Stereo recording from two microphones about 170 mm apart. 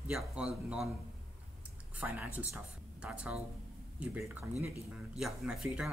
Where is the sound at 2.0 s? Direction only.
10° right (ahead or behind).